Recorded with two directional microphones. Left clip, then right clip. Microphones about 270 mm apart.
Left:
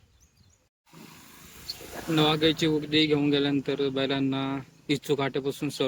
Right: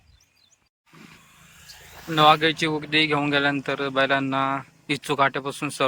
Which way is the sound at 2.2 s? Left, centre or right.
Centre.